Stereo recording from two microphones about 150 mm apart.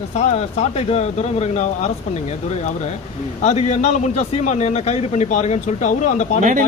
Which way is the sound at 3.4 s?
50° left (ahead or behind).